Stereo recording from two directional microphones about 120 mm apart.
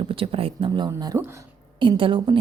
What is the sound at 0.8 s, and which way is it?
Speech, 30° right (ahead or behind).